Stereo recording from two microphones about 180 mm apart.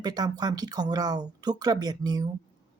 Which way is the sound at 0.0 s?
20° right (ahead or behind).